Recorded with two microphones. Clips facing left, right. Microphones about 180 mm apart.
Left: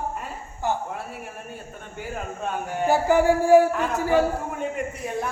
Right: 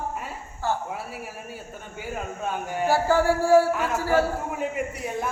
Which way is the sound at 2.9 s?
20° left (ahead or behind).